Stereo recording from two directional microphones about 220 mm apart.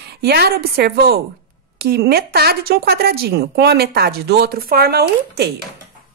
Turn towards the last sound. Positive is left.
turn(degrees=-45)  # may be behind; listen again after turning